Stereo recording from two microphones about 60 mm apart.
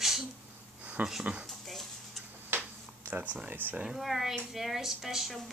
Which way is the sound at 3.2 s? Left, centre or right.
Right.